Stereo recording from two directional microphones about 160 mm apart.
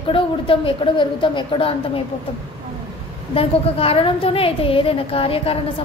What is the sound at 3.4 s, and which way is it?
A woman's voice, 35° left (ahead or behind).